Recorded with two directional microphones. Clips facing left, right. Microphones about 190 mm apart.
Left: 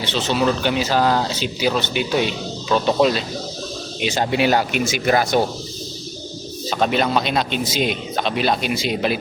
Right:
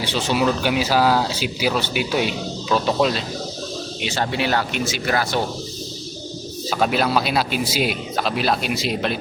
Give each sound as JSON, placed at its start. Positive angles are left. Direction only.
{"t": 0.0, "sound": "speech", "side_deg": -10}
{"t": 4.0, "sound": "speech", "side_deg": 15}
{"t": 6.7, "sound": "a man's voice", "side_deg": -5}